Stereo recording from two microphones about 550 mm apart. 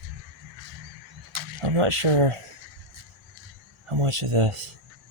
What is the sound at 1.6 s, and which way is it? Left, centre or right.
Speech, right.